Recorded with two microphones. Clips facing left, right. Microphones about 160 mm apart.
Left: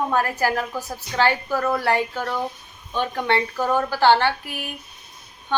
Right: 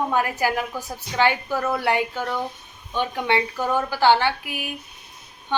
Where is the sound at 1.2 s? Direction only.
15° right (ahead or behind).